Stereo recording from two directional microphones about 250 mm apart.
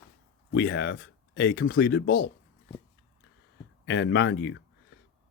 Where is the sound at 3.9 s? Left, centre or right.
Left.